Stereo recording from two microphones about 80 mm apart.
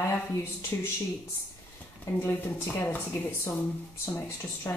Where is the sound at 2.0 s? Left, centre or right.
Left.